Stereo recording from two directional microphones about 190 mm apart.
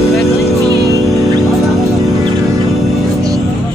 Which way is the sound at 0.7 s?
20° right (ahead or behind).